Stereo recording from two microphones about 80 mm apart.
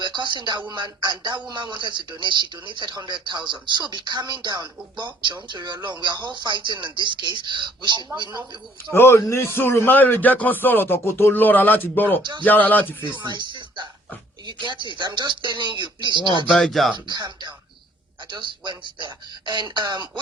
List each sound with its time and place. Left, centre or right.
0.0 s speech: right
8.9 s a man's voice: left
13.1 s speech: right
16.5 s speech: centre
16.9 s speech: right
18.3 s speech: right